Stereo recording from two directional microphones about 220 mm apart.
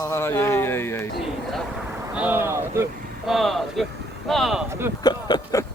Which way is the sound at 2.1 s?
10° right (ahead or behind).